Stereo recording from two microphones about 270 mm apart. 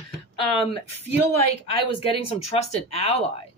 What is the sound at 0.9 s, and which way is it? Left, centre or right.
Speech, left.